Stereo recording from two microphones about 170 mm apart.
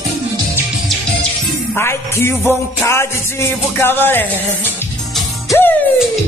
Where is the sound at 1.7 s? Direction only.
15° left (ahead or behind).